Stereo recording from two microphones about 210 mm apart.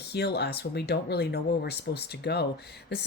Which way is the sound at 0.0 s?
50° left (ahead or behind).